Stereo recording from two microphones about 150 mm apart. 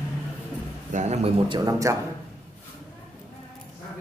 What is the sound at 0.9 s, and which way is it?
Speech, 50° right (ahead or behind).